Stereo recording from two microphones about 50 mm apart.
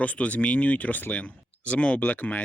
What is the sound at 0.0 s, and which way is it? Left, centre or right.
Speech, left.